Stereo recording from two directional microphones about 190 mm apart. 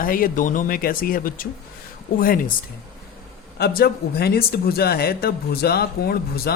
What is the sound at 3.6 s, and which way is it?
Speech, 55° left (ahead or behind).